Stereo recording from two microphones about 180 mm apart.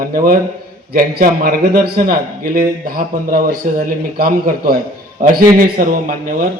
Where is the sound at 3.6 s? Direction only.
45° right (ahead or behind).